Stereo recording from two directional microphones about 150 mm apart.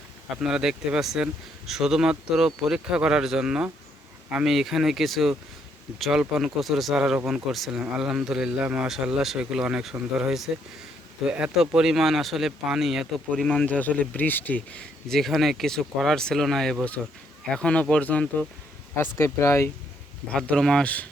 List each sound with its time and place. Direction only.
0.4 s speech: 5° right (ahead or behind)
13.5 s speech: 10° left (ahead or behind)
20.3 s speech: 5° left (ahead or behind)